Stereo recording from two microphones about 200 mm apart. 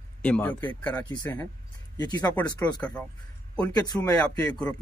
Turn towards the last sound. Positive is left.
turn(degrees=20)  # may be behind; listen again after turning